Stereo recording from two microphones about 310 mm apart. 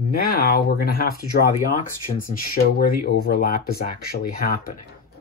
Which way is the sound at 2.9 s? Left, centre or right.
Left.